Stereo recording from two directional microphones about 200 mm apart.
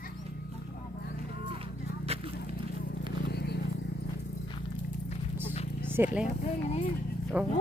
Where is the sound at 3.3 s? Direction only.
55° left (ahead or behind).